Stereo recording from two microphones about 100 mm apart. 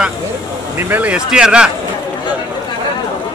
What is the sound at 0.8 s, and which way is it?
Speech, 15° right (ahead or behind).